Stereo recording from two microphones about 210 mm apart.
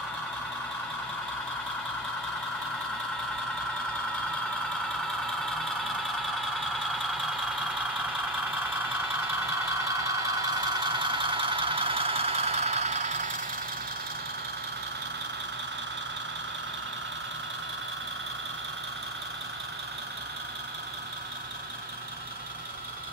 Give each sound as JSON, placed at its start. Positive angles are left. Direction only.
{"t": 10.0, "sound": "vehicle", "side_deg": -15}